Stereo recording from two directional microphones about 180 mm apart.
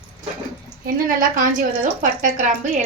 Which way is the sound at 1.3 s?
50° right (ahead or behind).